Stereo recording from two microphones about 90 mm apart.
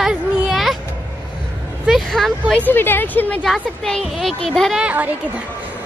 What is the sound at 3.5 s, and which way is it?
A woman's voice, 5° left (ahead or behind).